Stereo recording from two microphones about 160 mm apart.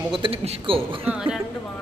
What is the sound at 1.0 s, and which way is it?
Speech, 5° right (ahead or behind).